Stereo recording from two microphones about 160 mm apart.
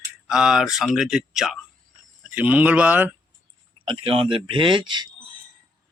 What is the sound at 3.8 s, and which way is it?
Speech, 35° right (ahead or behind).